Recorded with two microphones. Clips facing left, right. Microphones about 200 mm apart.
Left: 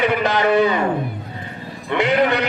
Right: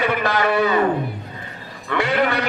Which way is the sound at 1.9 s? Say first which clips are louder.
Left 3 dB; 20° left (ahead or behind).